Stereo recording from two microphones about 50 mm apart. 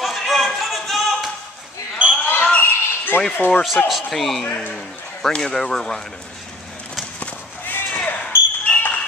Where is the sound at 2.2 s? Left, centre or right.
Left.